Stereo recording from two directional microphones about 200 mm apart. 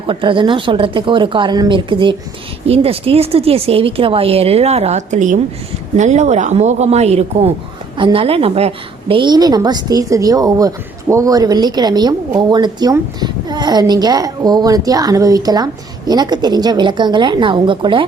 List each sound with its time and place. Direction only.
0.1 s a woman's voice: 25° right (ahead or behind)